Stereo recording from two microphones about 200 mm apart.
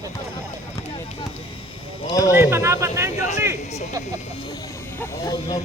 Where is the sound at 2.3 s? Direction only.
10° right (ahead or behind).